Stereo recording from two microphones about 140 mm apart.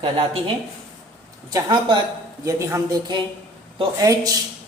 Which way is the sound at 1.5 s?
25° right (ahead or behind).